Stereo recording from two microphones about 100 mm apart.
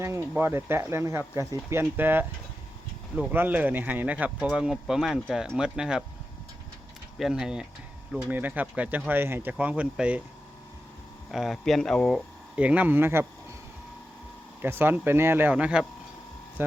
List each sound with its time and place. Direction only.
0.0 s speech: 25° right (ahead or behind)
1.8 s speech: 20° right (ahead or behind)
3.3 s speech: 20° right (ahead or behind)
7.2 s speech: 5° right (ahead or behind)
8.4 s speech: 20° right (ahead or behind)
11.3 s speech: centre (ahead or behind)
12.5 s speech: 15° right (ahead or behind)
14.6 s speech: 20° right (ahead or behind)
16.6 s speech: 20° right (ahead or behind)